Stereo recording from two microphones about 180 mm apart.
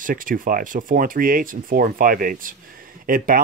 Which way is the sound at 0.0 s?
50° right (ahead or behind).